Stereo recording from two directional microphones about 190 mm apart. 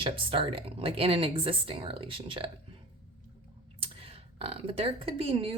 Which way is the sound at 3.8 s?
30° right (ahead or behind).